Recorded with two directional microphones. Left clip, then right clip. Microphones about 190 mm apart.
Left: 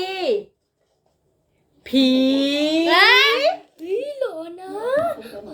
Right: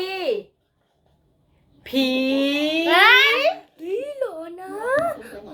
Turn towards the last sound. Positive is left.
turn(degrees=5)  # may be behind; listen again after turning